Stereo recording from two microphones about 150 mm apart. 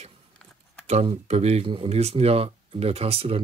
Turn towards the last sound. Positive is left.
turn(degrees=-40)  # may be behind; listen again after turning